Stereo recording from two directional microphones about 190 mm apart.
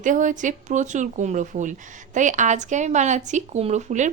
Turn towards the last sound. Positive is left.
turn(degrees=-40)  # may be behind; listen again after turning